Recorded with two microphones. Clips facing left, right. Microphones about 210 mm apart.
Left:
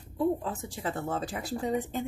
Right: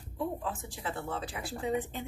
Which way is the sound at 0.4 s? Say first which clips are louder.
Left 3 dB; 40° left (ahead or behind).